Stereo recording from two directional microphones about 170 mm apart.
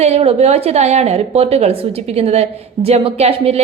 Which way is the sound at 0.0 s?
40° right (ahead or behind).